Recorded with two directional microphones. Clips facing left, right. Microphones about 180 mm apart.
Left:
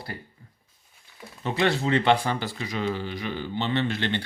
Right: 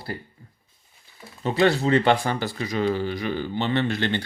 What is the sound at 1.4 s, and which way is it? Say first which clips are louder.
Speech: right 4 dB; 40° right (ahead or behind).